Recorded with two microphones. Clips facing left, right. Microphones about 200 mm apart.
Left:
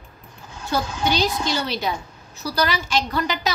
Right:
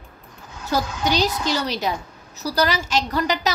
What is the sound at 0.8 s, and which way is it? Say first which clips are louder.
Speech: even; 30° left (ahead or behind).